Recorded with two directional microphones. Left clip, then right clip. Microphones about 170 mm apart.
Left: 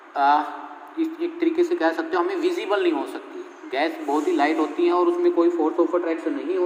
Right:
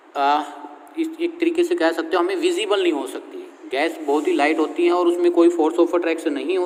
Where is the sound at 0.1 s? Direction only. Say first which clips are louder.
Even; 40° right (ahead or behind).